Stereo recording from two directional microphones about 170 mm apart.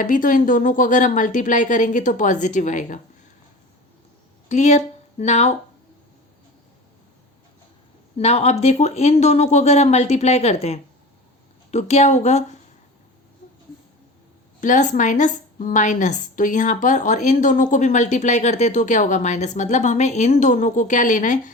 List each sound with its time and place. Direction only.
0.0 s a woman's voice: 55° left (ahead or behind)
4.4 s speech: 40° left (ahead or behind)
8.2 s speech: 40° left (ahead or behind)
14.6 s a woman's voice: 50° left (ahead or behind)